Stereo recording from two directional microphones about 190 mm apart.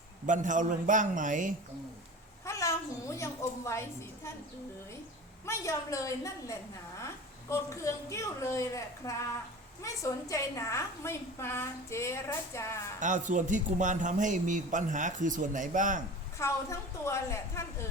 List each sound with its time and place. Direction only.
0.3 s a man's voice: 40° right (ahead or behind)
2.4 s a sound: 15° left (ahead or behind)
3.2 s a woman's voice: 15° left (ahead or behind)
5.5 s a woman's voice: 15° left (ahead or behind)
13.0 s a man's voice: 40° right (ahead or behind)
16.4 s a woman's voice: 15° left (ahead or behind)